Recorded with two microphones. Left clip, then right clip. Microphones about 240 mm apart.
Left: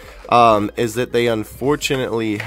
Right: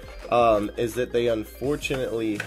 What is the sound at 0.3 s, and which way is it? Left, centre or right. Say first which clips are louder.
Speech: left 7 dB; left.